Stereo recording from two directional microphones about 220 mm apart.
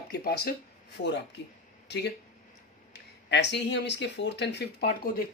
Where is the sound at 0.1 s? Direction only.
45° left (ahead or behind).